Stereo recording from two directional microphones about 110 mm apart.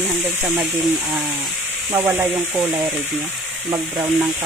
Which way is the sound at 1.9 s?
20° right (ahead or behind).